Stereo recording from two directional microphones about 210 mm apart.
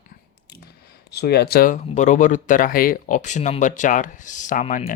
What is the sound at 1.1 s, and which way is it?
Speech, 50° left (ahead or behind).